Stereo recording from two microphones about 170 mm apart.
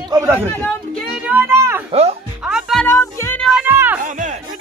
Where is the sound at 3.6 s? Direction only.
10° right (ahead or behind).